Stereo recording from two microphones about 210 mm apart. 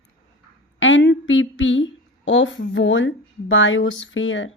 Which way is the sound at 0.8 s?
60° left (ahead or behind).